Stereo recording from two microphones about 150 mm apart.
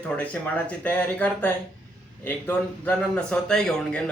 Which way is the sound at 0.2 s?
10° left (ahead or behind).